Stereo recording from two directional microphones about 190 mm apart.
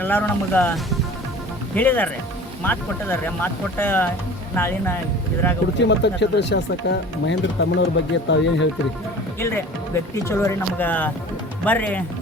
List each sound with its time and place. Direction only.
0.0 s speech: 10° left (ahead or behind)
5.8 s speech: 65° left (ahead or behind)
9.4 s speech: 10° left (ahead or behind)